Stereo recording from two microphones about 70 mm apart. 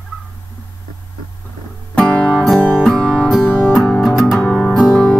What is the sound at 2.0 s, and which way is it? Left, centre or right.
Music, centre.